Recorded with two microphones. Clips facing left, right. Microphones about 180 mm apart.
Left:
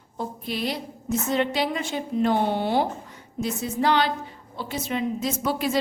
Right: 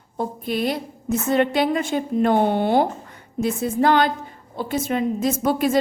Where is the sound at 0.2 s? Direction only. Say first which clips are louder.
Right 5 dB; 50° right (ahead or behind).